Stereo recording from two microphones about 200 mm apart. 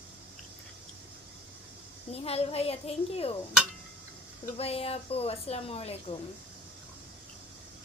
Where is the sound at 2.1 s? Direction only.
30° left (ahead or behind).